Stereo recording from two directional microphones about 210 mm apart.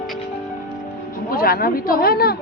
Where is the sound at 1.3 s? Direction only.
45° left (ahead or behind).